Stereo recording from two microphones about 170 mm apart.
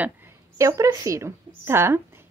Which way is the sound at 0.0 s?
15° right (ahead or behind).